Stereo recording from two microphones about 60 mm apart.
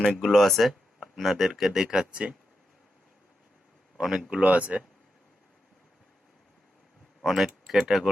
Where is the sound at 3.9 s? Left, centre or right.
Centre.